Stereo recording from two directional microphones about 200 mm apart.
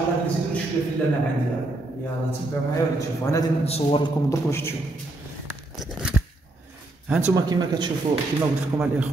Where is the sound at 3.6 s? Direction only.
30° left (ahead or behind).